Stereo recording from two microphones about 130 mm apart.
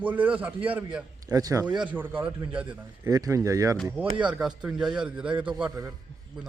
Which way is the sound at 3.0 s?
25° right (ahead or behind).